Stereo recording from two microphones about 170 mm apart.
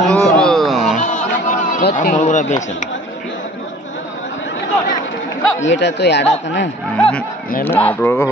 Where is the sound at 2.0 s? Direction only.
50° left (ahead or behind).